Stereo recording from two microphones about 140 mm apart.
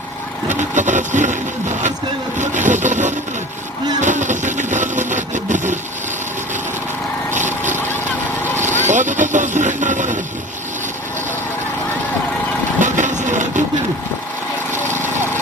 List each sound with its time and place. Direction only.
0.4 s speech: 60° right (ahead or behind)
2.4 s speech: 60° right (ahead or behind)
4.0 s vehicle: 60° right (ahead or behind)
8.7 s speech: 60° right (ahead or behind)
12.8 s vehicle: 60° right (ahead or behind)